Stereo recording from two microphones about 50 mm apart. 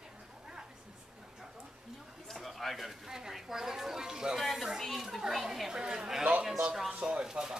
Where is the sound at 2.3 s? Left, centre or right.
Centre.